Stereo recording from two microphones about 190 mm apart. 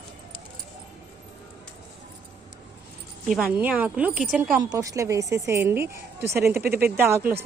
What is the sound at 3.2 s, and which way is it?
Speech, 5° right (ahead or behind).